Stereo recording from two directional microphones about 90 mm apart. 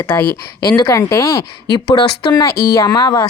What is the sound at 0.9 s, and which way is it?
Speech, 40° left (ahead or behind).